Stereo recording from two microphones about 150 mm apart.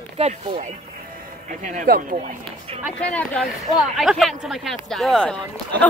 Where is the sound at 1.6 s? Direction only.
55° right (ahead or behind).